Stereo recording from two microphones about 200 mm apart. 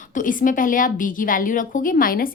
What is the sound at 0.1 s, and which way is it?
A woman's voice, 40° left (ahead or behind).